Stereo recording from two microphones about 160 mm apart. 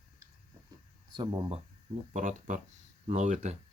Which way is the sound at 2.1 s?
50° right (ahead or behind).